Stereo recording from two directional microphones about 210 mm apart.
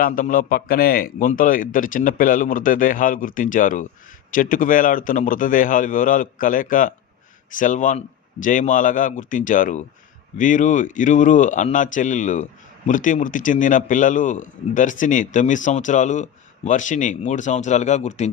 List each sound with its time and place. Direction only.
0.0 s speech: 40° left (ahead or behind)